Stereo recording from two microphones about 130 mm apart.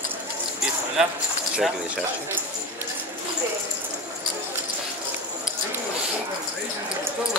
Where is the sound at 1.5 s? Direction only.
5° right (ahead or behind).